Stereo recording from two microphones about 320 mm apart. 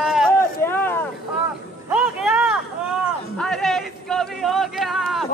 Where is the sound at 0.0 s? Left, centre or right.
Centre.